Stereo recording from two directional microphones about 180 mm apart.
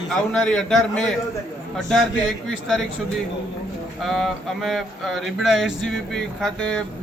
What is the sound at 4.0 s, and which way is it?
Speech, centre (ahead or behind).